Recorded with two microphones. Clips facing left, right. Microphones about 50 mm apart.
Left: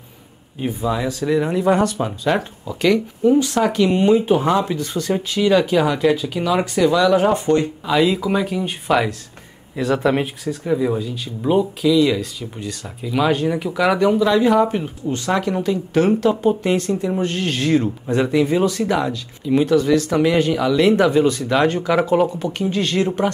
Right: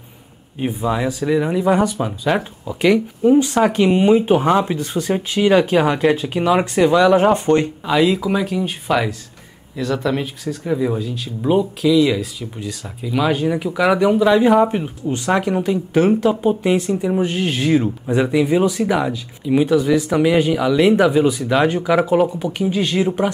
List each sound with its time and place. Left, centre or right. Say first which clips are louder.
0.6 s speech: right 1 dB; centre
7.3 s speech: right 2 dB; right
7.9 s speech: right 1 dB; centre
9.8 s speech: left 2 dB; centre
10.4 s speech: even; centre